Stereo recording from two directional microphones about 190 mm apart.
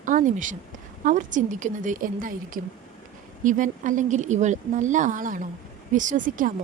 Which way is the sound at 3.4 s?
40° right (ahead or behind).